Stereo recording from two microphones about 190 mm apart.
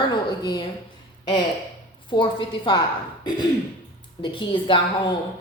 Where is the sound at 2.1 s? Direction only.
25° left (ahead or behind).